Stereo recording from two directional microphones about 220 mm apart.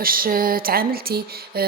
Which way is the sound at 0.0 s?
40° right (ahead or behind).